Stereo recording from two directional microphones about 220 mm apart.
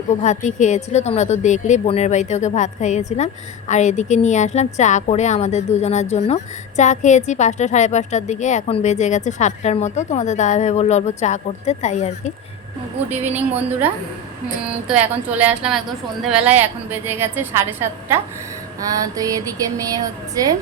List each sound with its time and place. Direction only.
0.1 s a woman's voice: 30° left (ahead or behind)
13.1 s speech: 10° right (ahead or behind)